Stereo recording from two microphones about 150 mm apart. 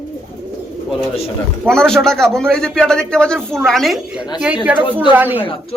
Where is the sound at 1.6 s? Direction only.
5° left (ahead or behind); by 5.4 s 10° right (ahead or behind).